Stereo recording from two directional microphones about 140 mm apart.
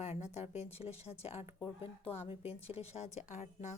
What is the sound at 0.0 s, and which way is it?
Speech, 50° left (ahead or behind).